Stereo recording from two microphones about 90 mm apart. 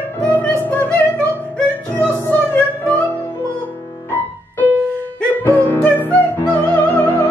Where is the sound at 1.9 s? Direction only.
15° left (ahead or behind).